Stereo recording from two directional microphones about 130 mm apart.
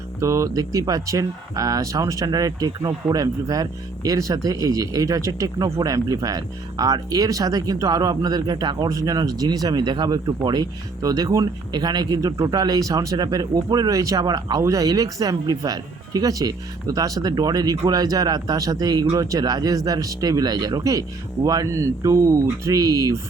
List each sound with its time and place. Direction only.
0.2 s speech: 25° right (ahead or behind)